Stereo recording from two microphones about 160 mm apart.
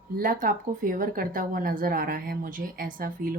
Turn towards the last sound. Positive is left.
turn(degrees=-60)  # may be behind; listen again after turning